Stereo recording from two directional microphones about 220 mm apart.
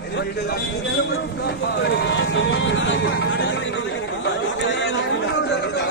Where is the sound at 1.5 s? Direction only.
50° left (ahead or behind).